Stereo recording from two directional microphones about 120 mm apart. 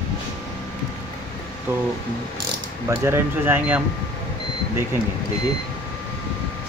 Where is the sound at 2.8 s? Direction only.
20° right (ahead or behind).